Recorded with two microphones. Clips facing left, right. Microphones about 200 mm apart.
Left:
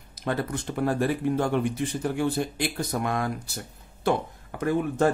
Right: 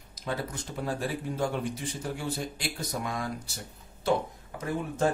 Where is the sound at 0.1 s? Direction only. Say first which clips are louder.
Left 6 dB; 60° left (ahead or behind).